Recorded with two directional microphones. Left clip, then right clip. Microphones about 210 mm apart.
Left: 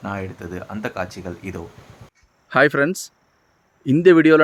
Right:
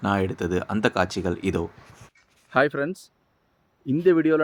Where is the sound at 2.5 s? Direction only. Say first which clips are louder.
Left 6 dB; 10° left (ahead or behind).